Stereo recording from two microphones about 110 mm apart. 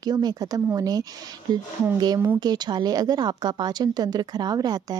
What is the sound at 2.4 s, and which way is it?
A woman's voice, 40° right (ahead or behind).